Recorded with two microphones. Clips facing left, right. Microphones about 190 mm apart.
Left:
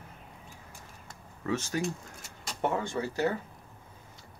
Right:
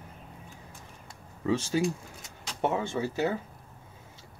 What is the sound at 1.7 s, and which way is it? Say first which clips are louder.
Speech: right 4 dB; 20° right (ahead or behind).